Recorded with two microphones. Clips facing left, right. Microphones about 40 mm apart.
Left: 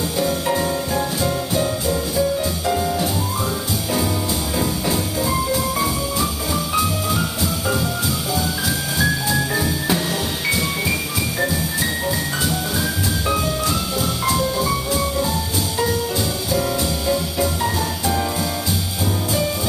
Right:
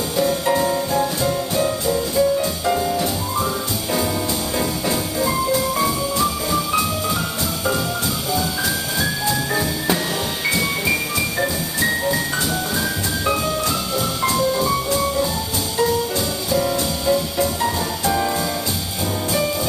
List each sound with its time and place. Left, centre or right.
0.2 s music: centre
4.6 s music: centre
9.0 s music: centre
11.4 s music: centre
14.2 s music: centre
16.5 s music: centre